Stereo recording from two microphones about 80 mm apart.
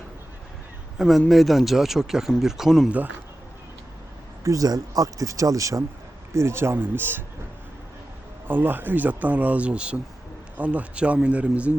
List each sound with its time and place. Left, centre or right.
0.9 s a man's voice: centre
4.4 s speech: right
8.4 s speech: right